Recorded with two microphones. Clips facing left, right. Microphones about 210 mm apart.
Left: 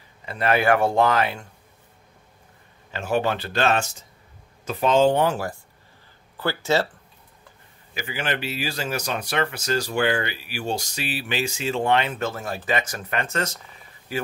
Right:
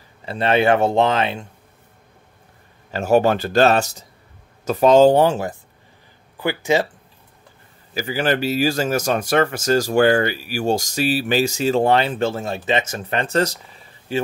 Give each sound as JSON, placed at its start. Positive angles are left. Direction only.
{"t": 0.2, "sound": "speech", "side_deg": -30}
{"t": 2.9, "sound": "a man's voice", "side_deg": -40}
{"t": 7.9, "sound": "a man's voice", "side_deg": -35}